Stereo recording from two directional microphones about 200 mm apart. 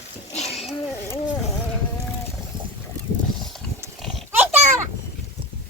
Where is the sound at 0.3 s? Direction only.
35° left (ahead or behind).